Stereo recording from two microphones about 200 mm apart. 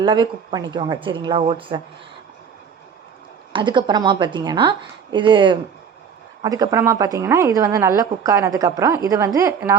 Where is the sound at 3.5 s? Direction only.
25° right (ahead or behind).